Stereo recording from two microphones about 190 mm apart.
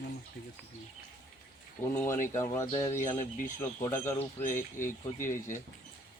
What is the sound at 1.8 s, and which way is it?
Speech, 5° left (ahead or behind).